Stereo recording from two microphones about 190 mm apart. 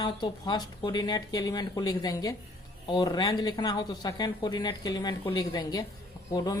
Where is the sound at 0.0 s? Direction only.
20° left (ahead or behind).